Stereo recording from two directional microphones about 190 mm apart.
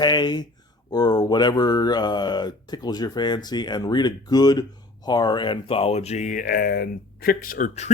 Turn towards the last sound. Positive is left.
turn(degrees=40)  # may be behind; listen again after turning